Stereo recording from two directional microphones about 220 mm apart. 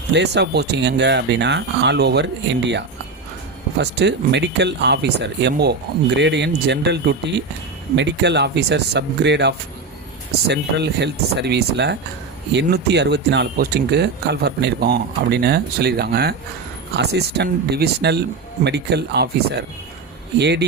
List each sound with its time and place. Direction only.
0.1 s speech: 50° right (ahead or behind)